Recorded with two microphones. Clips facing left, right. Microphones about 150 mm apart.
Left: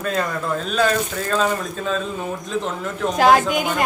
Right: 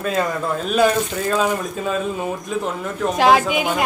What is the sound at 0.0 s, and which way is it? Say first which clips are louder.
Speech: right 2 dB; 5° right (ahead or behind).